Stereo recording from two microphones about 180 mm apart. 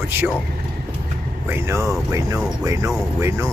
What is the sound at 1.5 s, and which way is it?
Speech, 15° right (ahead or behind).